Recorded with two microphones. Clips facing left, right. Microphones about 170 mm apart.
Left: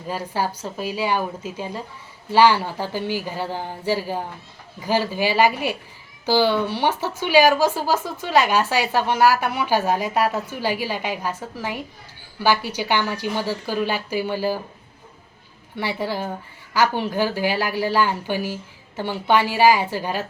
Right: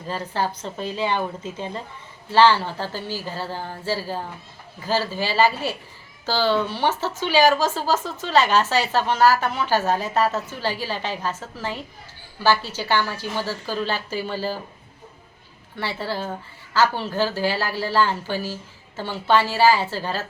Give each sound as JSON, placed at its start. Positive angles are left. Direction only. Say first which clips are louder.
{"t": 0.1, "sound": "speech", "louder": "left 1 dB", "side_deg": 10}
{"t": 15.8, "sound": "speech", "louder": "left 2 dB", "side_deg": 15}